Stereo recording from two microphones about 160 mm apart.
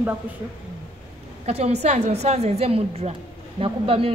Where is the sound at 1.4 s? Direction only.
45° right (ahead or behind).